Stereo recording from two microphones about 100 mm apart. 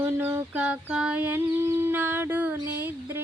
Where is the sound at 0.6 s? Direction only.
10° right (ahead or behind).